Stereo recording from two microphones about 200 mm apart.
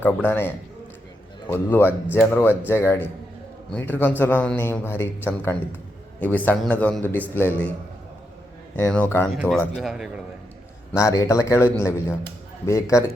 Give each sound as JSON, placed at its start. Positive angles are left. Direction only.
{"t": 0.3, "sound": "a man's voice", "side_deg": 10}
{"t": 8.7, "sound": "a man's voice", "side_deg": 10}
{"t": 9.3, "sound": "a man's voice", "side_deg": 0}
{"t": 10.9, "sound": "a man's voice", "side_deg": 15}